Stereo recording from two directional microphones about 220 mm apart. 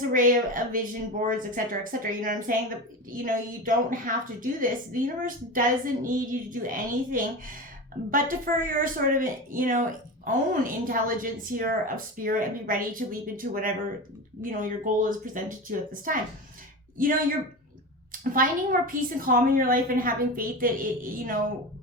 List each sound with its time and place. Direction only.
0.1 s a woman's voice: 40° right (ahead or behind)